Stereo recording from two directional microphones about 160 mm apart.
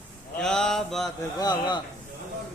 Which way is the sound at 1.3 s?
25° left (ahead or behind).